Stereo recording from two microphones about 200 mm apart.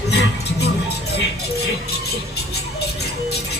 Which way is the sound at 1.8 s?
55° left (ahead or behind).